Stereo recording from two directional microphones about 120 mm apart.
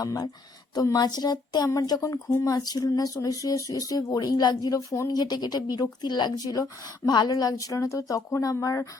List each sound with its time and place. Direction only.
0.0 s speech: 30° left (ahead or behind)